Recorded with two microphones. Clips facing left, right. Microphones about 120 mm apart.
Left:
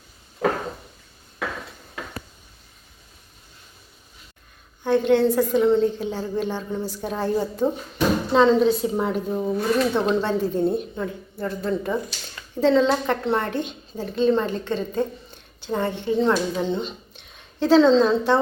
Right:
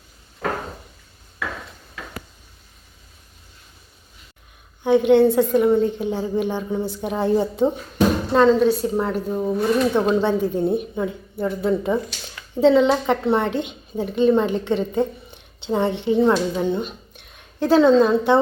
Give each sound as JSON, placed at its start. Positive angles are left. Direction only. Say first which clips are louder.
{"t": 4.8, "sound": "speech", "louder": "right 4 dB", "side_deg": -15}
{"t": 8.3, "sound": "a woman's voice", "louder": "right 1 dB", "side_deg": 0}